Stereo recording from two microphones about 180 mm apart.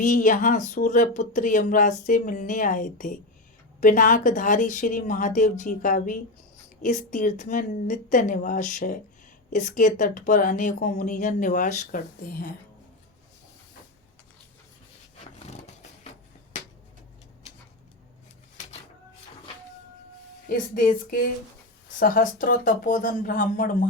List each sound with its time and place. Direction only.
0.0 s speech: 45° left (ahead or behind)
15.2 s a sound: 40° left (ahead or behind)
20.5 s speech: 50° left (ahead or behind)